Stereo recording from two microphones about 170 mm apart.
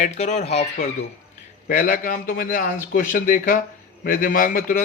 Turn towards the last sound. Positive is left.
turn(degrees=50)  # may be behind; listen again after turning